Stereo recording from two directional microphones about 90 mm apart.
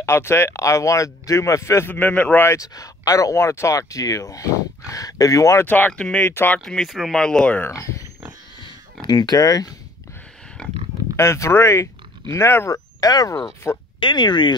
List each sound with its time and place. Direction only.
0.0 s speech: 30° left (ahead or behind)
2.0 s speech: 20° left (ahead or behind)
2.5 s speech: 40° left (ahead or behind)
5.7 s speech: 15° left (ahead or behind)
6.2 s speech: 25° left (ahead or behind)
6.5 s speech: 5° left (ahead or behind)
7.7 s speech: 35° left (ahead or behind)
9.0 s speech: 50° left (ahead or behind)
10.6 s speech: 10° left (ahead or behind)
11.1 s speech: 30° left (ahead or behind)
12.6 s speech: 45° left (ahead or behind)
13.9 s speech: 60° left (ahead or behind)